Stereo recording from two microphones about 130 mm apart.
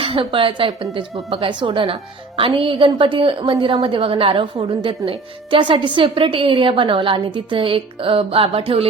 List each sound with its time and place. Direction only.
0.0 s a woman's voice: 40° right (ahead or behind)